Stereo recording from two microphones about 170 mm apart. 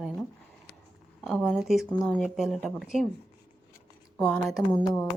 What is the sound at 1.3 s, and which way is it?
A woman's voice, centre (ahead or behind).